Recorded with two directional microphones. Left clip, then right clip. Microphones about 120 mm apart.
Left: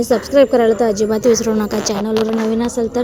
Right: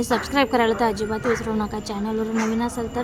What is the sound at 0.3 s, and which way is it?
A woman's voice, 25° left (ahead or behind).